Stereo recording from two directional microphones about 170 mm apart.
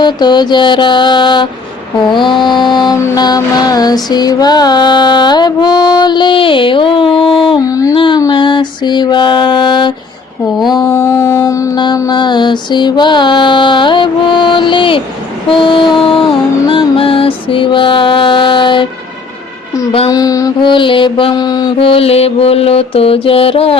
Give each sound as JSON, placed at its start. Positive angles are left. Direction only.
{"t": 0.0, "sound": "mantra", "side_deg": 25}
{"t": 10.8, "sound": "mantra", "side_deg": 15}
{"t": 20.1, "sound": "mantra", "side_deg": 20}